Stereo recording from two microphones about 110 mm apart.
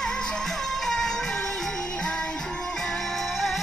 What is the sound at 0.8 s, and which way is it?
Music, 5° left (ahead or behind).